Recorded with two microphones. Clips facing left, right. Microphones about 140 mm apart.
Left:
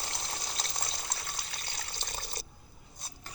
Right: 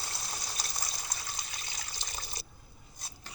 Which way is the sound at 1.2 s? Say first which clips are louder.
Left 1 dB; 55° left (ahead or behind).